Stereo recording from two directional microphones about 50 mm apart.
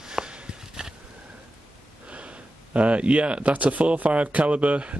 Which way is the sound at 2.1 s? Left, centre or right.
Right.